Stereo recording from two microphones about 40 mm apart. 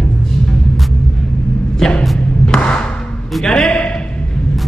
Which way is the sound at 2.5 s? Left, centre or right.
Left.